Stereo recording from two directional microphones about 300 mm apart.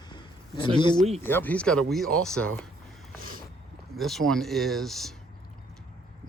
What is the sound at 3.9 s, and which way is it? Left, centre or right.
Speech, centre.